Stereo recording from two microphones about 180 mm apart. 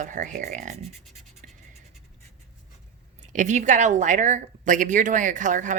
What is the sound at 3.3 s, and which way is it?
Speech, 45° right (ahead or behind).